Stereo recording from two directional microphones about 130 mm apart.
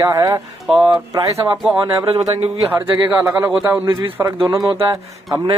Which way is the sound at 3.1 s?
25° right (ahead or behind).